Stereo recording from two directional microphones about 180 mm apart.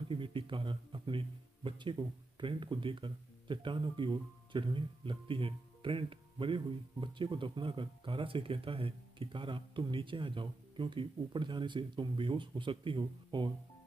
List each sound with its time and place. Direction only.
0.1 s speech: 30° right (ahead or behind)